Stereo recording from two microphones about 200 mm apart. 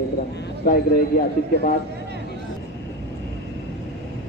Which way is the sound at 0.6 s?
45° left (ahead or behind).